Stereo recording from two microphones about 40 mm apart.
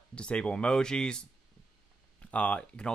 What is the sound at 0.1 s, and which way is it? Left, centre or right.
Speech, left.